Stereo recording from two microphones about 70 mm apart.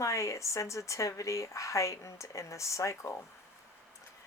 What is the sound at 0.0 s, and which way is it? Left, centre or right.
Speech, left.